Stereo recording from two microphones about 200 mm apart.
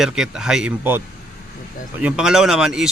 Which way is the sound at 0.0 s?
5° right (ahead or behind).